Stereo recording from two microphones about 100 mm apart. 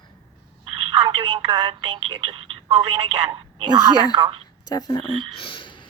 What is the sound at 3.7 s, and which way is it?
Speech, 45° right (ahead or behind).